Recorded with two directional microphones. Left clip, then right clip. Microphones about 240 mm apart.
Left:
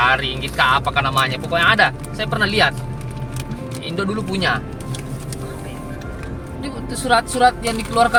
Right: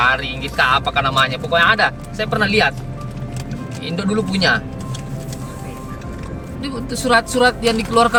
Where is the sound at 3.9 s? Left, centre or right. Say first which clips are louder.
Right 2 dB; centre.